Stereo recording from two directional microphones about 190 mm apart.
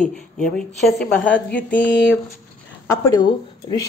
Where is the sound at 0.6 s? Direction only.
5° left (ahead or behind).